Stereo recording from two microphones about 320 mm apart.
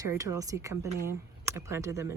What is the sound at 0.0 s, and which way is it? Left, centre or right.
Speech, centre.